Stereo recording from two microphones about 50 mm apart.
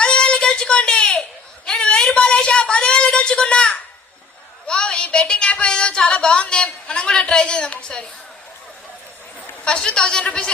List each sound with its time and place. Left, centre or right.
0.0 s a sound: centre
5.1 s a woman's voice: left
9.6 s a man's voice: centre